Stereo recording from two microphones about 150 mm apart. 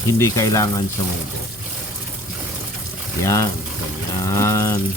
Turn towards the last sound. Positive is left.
turn(degrees=20)  # may be behind; listen again after turning